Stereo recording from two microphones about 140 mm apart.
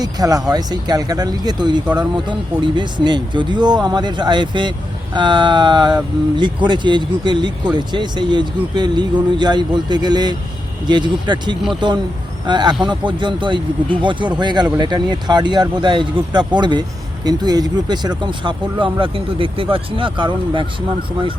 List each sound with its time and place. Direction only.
0.0 s speech: 25° right (ahead or behind)